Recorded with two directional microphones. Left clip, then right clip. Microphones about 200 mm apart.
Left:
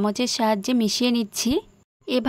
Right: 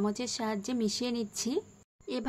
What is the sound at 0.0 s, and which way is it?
A woman's voice, 50° left (ahead or behind).